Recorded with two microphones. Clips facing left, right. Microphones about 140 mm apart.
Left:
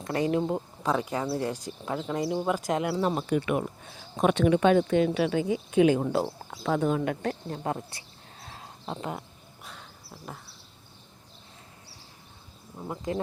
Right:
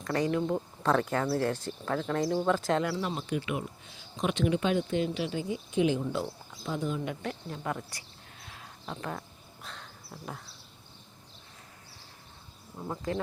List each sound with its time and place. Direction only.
0.0 s speech: 25° left (ahead or behind)
0.8 s speech: 10° left (ahead or behind)
3.2 s speech: 50° left (ahead or behind)
6.5 s speech: 70° left (ahead or behind)
7.4 s a sound: 30° left (ahead or behind)
9.6 s a sound: 10° left (ahead or behind)
12.7 s speech: 5° left (ahead or behind)